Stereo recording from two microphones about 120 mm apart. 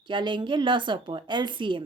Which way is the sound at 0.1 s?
40° right (ahead or behind).